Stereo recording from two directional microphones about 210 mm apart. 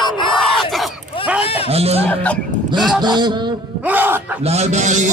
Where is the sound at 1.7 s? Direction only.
30° right (ahead or behind).